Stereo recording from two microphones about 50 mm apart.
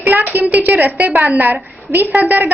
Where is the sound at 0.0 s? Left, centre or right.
Right.